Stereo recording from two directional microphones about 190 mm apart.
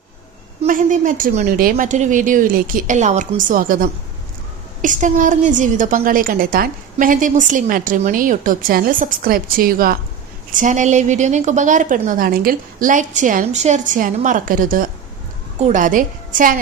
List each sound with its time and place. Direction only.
0.6 s a woman's voice: 45° right (ahead or behind)
1.7 s a woman's voice: 40° right (ahead or behind)